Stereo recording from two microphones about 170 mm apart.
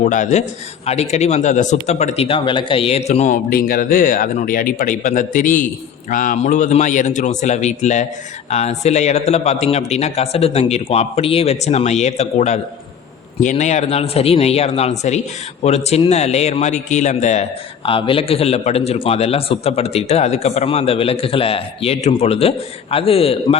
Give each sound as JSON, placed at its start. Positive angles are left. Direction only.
{"t": 0.0, "sound": "a man's voice", "side_deg": 50}
{"t": 17.8, "sound": "a man's voice", "side_deg": 30}